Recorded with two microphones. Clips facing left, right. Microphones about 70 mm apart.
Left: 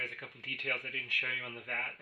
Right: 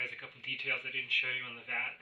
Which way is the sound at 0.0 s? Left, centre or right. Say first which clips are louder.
Left 1 dB; left.